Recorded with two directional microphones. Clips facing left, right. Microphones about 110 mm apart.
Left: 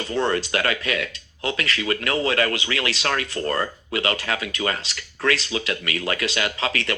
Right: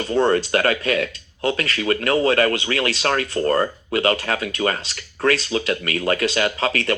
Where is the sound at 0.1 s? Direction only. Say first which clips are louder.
Right 5 dB; 40° right (ahead or behind).